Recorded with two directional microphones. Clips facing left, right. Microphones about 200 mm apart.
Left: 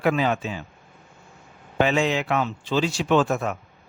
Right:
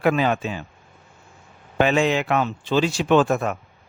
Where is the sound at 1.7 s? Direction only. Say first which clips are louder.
Right 2 dB; 55° right (ahead or behind).